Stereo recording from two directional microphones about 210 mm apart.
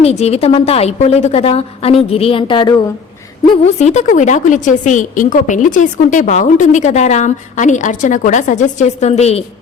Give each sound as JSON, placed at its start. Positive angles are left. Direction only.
{"t": 0.0, "sound": "a woman's voice", "side_deg": 30}
{"t": 3.8, "sound": "a woman's voice", "side_deg": 35}